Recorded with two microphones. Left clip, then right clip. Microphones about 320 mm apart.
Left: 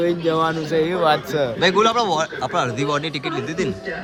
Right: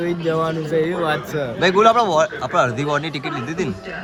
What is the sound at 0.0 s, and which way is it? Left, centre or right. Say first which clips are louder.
Speech: left 2 dB; centre.